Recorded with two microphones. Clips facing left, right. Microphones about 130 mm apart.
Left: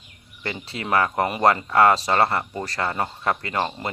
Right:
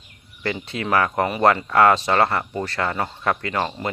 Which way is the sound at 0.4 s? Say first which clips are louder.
Right 4 dB; 30° left (ahead or behind).